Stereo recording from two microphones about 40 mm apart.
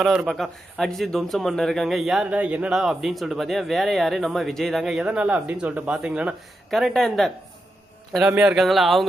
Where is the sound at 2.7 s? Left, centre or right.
Centre.